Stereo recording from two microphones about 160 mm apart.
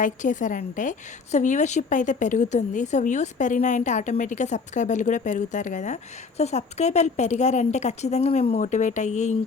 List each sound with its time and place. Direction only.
0.0 s a woman's voice: 50° left (ahead or behind)